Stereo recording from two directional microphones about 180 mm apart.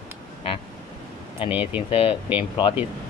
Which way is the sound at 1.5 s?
10° right (ahead or behind).